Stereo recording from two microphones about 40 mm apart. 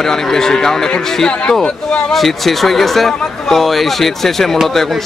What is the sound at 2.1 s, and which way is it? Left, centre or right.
Speech, centre.